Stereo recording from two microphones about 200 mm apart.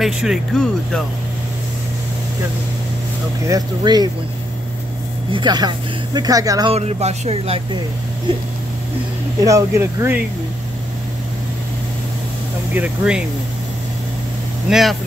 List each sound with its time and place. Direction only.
0.0 s speech: centre (ahead or behind)
3.4 s speech: 20° right (ahead or behind)
5.3 s speech: 20° right (ahead or behind)
6.7 s speech: 30° right (ahead or behind)
9.4 s speech: 15° right (ahead or behind)
12.7 s speech: 5° right (ahead or behind)
14.7 s speech: centre (ahead or behind)